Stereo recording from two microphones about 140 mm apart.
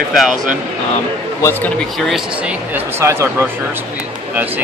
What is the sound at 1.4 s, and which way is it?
Speech, 15° left (ahead or behind).